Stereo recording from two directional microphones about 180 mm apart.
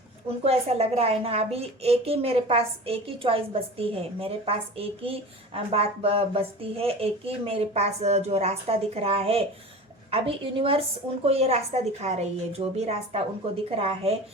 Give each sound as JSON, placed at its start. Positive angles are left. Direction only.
{"t": 0.4, "sound": "a woman's voice", "side_deg": -35}